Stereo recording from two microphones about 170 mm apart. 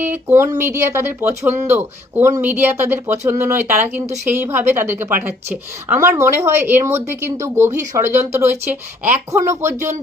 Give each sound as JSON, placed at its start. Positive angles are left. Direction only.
{"t": 0.0, "sound": "speech", "side_deg": -15}